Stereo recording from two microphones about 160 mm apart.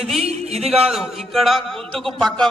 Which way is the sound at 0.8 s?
Centre (ahead or behind).